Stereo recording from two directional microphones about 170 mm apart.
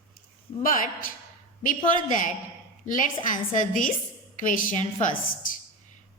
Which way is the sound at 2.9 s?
50° left (ahead or behind).